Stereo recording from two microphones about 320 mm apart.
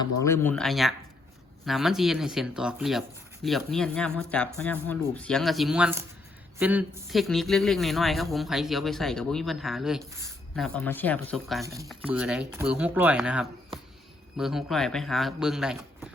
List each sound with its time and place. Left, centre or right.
0.0 s a man's voice: centre